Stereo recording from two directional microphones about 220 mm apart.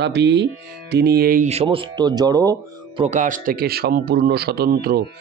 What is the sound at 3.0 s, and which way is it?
A man's voice, 35° right (ahead or behind).